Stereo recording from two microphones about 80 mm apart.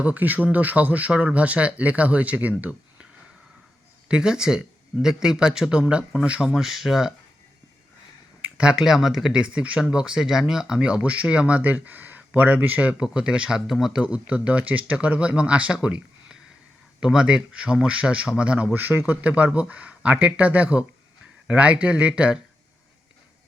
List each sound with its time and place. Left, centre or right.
0.0 s speech: centre
4.1 s speech: centre
6.5 s speech: centre
8.4 s speech: centre
14.0 s speech: centre